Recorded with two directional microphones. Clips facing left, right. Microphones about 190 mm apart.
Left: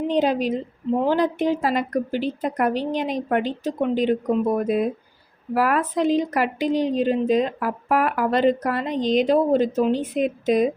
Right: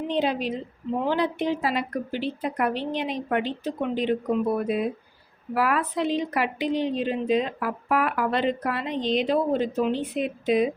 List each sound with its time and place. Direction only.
0.1 s a woman's voice: 45° left (ahead or behind)